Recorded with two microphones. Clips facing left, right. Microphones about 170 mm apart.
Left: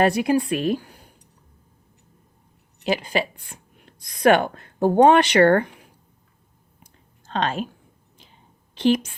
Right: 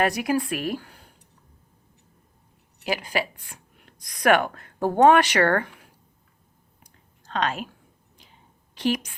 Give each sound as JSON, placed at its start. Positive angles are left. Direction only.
{"t": 0.0, "sound": "a woman's voice", "side_deg": 25}
{"t": 2.8, "sound": "speech", "side_deg": 25}
{"t": 7.3, "sound": "a woman's voice", "side_deg": 30}
{"t": 8.7, "sound": "a woman's voice", "side_deg": 25}